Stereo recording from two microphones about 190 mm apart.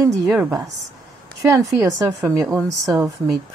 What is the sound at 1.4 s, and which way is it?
Speech, 15° right (ahead or behind).